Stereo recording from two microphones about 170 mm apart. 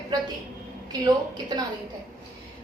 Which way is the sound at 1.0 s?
25° right (ahead or behind).